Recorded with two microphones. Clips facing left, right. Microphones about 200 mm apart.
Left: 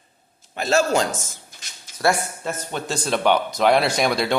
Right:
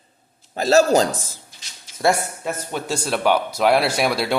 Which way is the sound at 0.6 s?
40° right (ahead or behind).